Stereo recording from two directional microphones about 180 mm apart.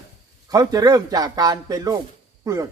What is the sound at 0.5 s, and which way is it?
A man's voice, 20° right (ahead or behind).